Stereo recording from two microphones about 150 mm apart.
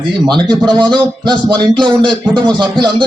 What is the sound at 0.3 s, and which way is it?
Speech, 30° right (ahead or behind).